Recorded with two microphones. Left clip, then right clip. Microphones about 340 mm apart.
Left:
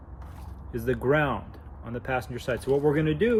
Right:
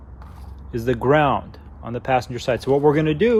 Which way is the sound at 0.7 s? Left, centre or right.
Centre.